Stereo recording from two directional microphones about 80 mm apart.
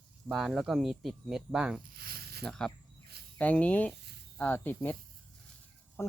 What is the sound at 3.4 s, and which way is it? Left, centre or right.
Speech, centre.